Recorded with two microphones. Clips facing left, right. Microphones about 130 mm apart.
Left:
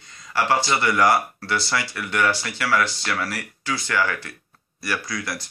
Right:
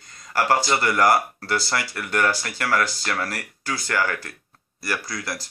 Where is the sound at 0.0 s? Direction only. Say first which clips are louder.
Even; 45° right (ahead or behind).